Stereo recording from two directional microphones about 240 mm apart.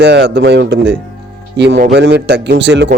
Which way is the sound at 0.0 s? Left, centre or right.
Right.